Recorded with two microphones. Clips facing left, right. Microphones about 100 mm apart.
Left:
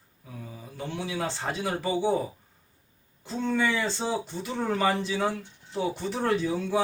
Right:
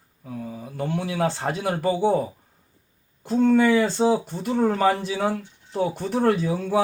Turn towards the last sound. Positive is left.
turn(degrees=-50)  # may be behind; listen again after turning